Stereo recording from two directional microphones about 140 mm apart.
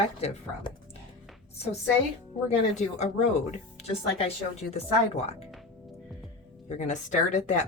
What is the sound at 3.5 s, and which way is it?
Speech, 50° left (ahead or behind).